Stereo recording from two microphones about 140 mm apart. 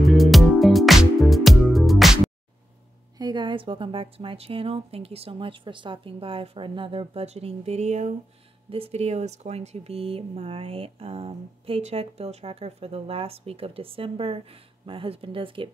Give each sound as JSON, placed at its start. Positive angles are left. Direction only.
{"t": 0.0, "sound": "music", "side_deg": 0}
{"t": 3.2, "sound": "a woman's voice", "side_deg": -30}
{"t": 8.6, "sound": "speech", "side_deg": -45}